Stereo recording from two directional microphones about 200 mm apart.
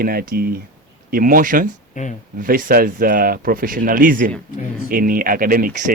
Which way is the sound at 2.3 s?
45° right (ahead or behind).